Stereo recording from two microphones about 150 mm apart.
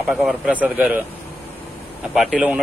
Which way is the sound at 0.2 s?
10° right (ahead or behind).